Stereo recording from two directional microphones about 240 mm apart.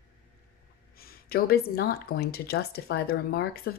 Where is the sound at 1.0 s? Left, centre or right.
Left.